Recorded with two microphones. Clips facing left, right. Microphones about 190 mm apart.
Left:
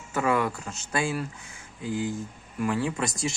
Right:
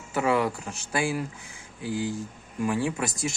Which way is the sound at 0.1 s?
15° right (ahead or behind).